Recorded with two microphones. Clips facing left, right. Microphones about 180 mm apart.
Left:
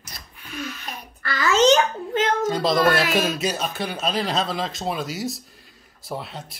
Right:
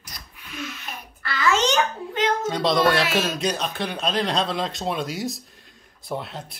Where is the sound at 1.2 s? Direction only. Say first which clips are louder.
Left 1 dB; 40° left (ahead or behind).